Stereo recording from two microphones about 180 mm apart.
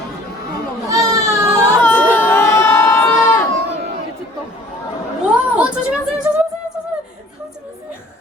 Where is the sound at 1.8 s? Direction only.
10° left (ahead or behind).